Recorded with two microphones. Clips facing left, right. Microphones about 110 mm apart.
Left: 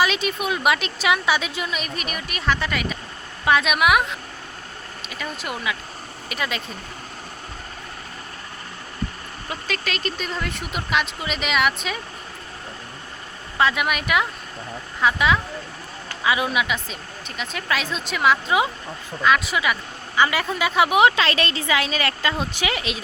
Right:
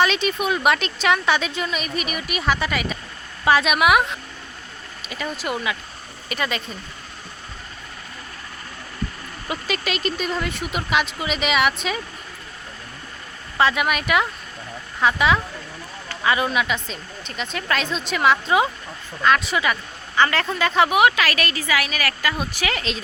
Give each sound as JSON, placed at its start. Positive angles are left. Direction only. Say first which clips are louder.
{"t": 0.0, "sound": "a woman's voice", "louder": "right 2 dB", "side_deg": 5}
{"t": 9.5, "sound": "a woman's voice", "louder": "right 3 dB", "side_deg": -5}
{"t": 13.6, "sound": "a woman's voice", "louder": "right 1 dB", "side_deg": 0}
{"t": 20.9, "sound": "speech", "louder": "left 1 dB", "side_deg": 25}